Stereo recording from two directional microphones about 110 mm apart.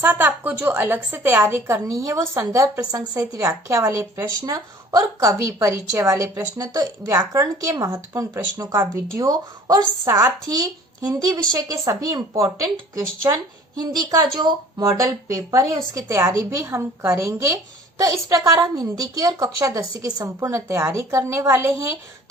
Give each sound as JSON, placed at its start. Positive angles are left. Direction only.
{"t": 0.0, "sound": "speech", "side_deg": -15}
{"t": 13.0, "sound": "speech", "side_deg": -25}
{"t": 13.7, "sound": "speech", "side_deg": -35}